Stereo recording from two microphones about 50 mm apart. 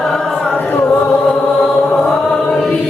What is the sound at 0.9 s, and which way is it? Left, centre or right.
Chant, centre.